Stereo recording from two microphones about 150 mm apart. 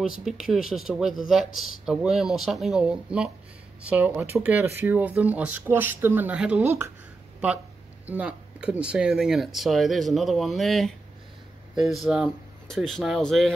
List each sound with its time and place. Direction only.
0.0 s speech: 5° right (ahead or behind)
8.1 s speech: 10° right (ahead or behind)